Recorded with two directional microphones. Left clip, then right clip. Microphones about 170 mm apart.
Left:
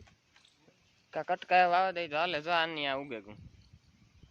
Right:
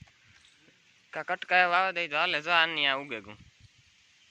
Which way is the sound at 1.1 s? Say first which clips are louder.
Right 1 dB; 20° left (ahead or behind).